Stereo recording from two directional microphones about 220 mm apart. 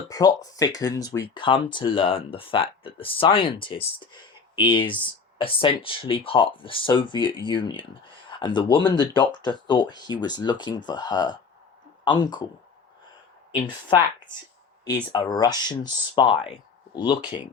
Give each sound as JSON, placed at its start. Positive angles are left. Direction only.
{"t": 0.1, "sound": "speech", "side_deg": 15}
{"t": 13.6, "sound": "speech", "side_deg": 20}